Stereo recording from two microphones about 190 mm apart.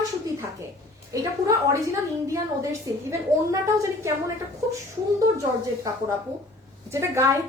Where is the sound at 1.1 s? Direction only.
15° right (ahead or behind).